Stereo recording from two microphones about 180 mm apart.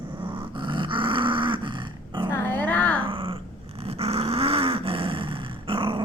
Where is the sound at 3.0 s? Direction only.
30° right (ahead or behind).